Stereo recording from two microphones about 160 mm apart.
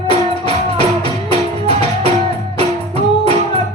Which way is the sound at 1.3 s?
40° right (ahead or behind).